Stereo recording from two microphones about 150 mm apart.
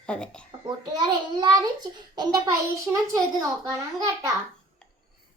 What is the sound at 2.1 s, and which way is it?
Speech, 25° right (ahead or behind).